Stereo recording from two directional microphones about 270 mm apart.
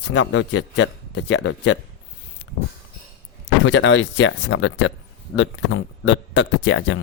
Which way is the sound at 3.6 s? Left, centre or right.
Left.